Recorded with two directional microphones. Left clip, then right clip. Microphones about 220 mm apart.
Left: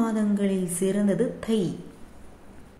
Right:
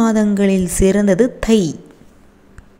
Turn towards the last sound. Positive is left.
turn(degrees=-40)  # may be behind; listen again after turning